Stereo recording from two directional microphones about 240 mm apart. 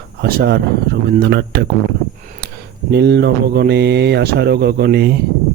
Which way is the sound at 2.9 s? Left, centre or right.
Right.